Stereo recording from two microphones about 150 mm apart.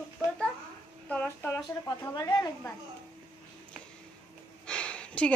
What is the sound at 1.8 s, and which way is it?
Speech, 25° left (ahead or behind).